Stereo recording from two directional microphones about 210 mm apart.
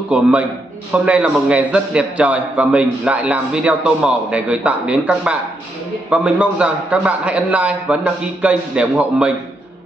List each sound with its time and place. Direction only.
0.1 s a man's voice: 5° right (ahead or behind)